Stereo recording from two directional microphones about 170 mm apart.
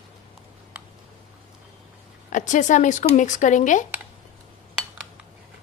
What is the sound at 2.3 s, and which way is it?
Speech, 45° left (ahead or behind).